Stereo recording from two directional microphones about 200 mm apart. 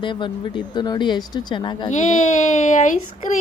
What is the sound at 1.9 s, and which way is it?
A woman's voice, 40° left (ahead or behind).